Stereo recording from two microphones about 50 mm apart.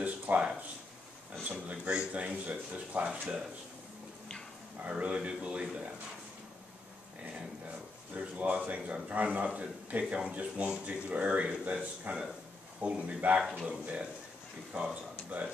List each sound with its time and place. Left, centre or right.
0.3 s speech: right
1.4 s a man's voice: right
3.1 s speech: centre
4.8 s a man's voice: right
8.1 s a man's voice: right
15.3 s a man's voice: right